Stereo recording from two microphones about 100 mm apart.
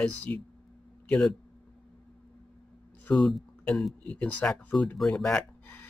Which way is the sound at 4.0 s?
15° left (ahead or behind).